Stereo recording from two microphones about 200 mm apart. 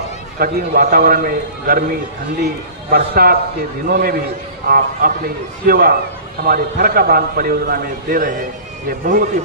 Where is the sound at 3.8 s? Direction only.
50° right (ahead or behind).